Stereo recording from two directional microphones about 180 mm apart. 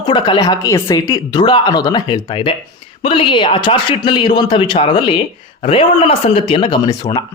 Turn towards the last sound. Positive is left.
turn(degrees=20)  # may be behind; listen again after turning